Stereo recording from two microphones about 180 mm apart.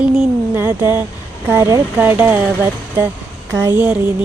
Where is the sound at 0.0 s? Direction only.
5° right (ahead or behind).